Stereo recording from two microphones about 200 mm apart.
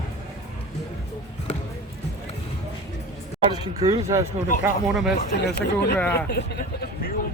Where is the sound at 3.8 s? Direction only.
15° right (ahead or behind).